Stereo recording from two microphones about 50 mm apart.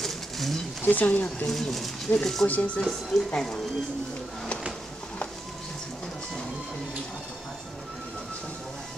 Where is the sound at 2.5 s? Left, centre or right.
Left.